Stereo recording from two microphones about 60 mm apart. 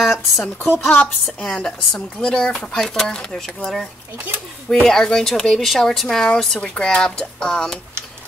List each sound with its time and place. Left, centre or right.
0.0 s speech: centre
0.6 s a woman's voice: left
1.4 s a woman's voice: centre
4.8 s a woman's voice: centre